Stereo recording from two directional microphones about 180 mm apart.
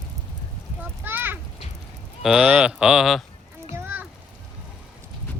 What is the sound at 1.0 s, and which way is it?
Children playing, 10° right (ahead or behind).